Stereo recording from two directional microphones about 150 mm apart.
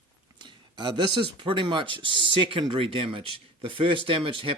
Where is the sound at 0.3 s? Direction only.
30° right (ahead or behind).